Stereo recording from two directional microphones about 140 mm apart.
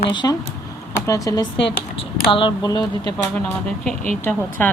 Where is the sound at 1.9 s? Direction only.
35° left (ahead or behind).